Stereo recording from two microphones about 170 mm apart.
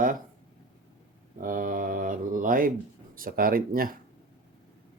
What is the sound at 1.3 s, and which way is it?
Speech, 55° right (ahead or behind).